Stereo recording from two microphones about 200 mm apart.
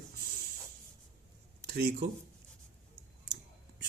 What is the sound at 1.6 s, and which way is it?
Speech, 50° right (ahead or behind).